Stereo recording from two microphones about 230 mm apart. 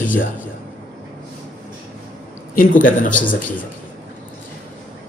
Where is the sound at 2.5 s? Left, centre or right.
Left.